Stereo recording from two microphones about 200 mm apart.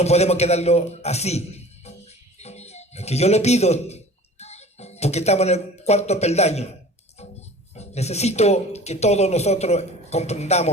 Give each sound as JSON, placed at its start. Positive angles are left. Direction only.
{"t": 0.0, "sound": "a man's voice", "side_deg": 35}
{"t": 7.8, "sound": "speech", "side_deg": 35}